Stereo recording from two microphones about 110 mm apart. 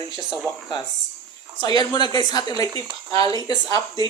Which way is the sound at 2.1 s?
40° left (ahead or behind).